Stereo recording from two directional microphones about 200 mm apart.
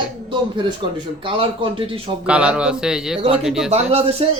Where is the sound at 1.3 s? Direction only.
25° right (ahead or behind).